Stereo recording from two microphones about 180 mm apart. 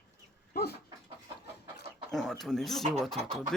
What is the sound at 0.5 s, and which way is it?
Chicken, 60° left (ahead or behind).